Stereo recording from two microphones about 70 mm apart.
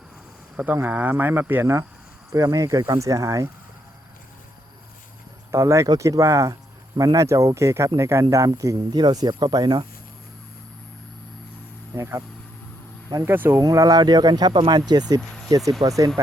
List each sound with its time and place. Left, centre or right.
0.5 s speech: centre
2.3 s speech: right
5.5 s speech: right
6.9 s speech: right
8.9 s speech: right
11.9 s speech: right
13.2 s speech: right
13.6 s speech: right
15.9 s speech: right